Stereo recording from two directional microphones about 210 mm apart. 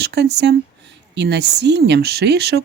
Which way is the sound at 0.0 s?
55° right (ahead or behind).